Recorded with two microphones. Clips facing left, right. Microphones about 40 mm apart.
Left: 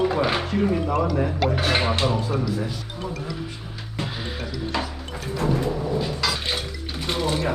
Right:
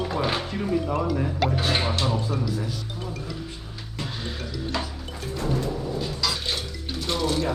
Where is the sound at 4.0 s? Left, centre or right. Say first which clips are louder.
Left 3 dB; centre.